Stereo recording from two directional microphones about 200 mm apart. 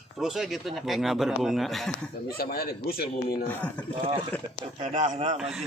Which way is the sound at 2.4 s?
50° left (ahead or behind).